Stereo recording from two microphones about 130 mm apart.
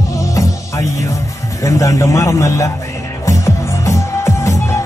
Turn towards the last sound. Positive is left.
turn(degrees=25)  # may be behind; listen again after turning